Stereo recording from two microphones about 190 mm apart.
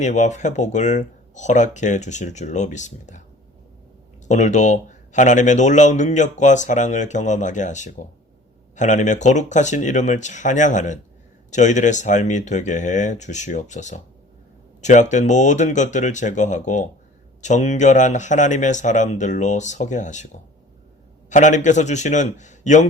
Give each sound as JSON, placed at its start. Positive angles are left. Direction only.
{"t": 0.0, "sound": "speech", "side_deg": 40}
{"t": 4.3, "sound": "speech", "side_deg": 40}